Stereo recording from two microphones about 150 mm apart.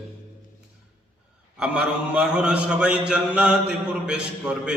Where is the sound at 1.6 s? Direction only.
5° right (ahead or behind).